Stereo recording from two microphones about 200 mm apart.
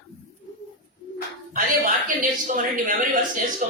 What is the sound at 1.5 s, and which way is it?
A man's voice, 40° right (ahead or behind).